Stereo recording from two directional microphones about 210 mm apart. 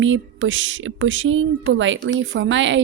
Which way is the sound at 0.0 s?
65° right (ahead or behind).